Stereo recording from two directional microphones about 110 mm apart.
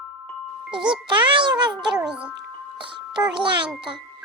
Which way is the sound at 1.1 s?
45° right (ahead or behind).